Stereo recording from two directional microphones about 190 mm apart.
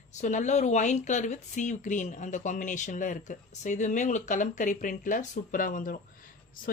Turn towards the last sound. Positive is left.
turn(degrees=50)  # may be behind; listen again after turning